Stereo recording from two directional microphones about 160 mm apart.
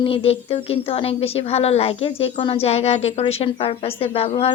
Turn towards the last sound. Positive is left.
turn(degrees=40)  # may be behind; listen again after turning